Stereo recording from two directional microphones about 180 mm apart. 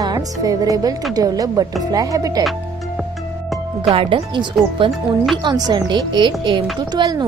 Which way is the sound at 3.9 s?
30° right (ahead or behind).